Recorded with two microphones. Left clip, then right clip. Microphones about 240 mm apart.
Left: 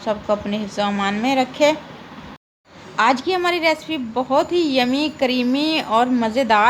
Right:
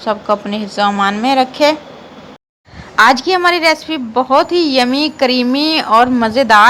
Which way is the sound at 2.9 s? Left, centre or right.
Centre.